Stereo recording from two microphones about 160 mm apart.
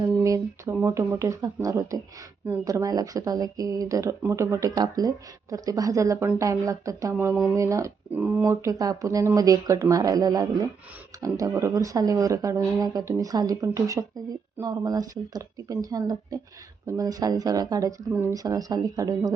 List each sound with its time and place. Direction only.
0.2 s speech: 20° right (ahead or behind)